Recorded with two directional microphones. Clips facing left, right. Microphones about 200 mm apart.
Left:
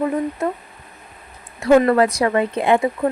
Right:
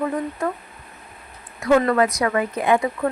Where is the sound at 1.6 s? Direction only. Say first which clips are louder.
Left 4 dB; 25° left (ahead or behind).